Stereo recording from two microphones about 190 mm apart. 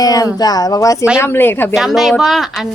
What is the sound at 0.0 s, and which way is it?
Speech, 20° left (ahead or behind).